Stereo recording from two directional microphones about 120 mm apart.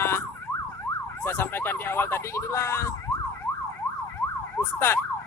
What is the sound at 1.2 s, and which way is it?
Emergency vehicle, 20° left (ahead or behind).